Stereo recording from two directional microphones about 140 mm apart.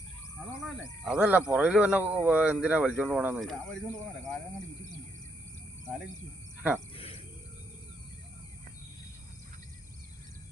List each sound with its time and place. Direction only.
1.0 s speech: 5° right (ahead or behind)
3.4 s speech: 5° left (ahead or behind)
6.6 s speech: 10° right (ahead or behind)
6.9 s cricket: 45° left (ahead or behind)